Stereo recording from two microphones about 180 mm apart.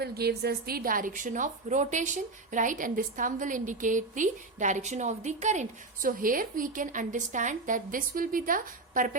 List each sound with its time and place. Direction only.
0.0 s a woman's voice: 60° right (ahead or behind)